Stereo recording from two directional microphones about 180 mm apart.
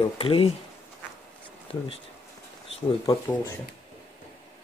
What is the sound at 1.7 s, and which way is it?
Speech, 30° left (ahead or behind).